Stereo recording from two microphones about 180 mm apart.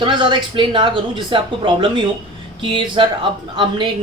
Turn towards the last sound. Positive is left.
turn(degrees=-25)  # may be behind; listen again after turning